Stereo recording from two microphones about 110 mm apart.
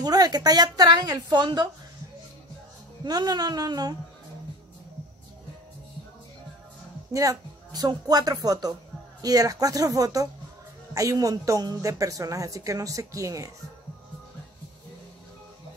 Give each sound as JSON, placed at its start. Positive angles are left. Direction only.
{"t": 0.0, "sound": "a woman's voice", "side_deg": -35}
{"t": 3.0, "sound": "a woman's voice", "side_deg": -40}
{"t": 7.1, "sound": "a woman's voice", "side_deg": -30}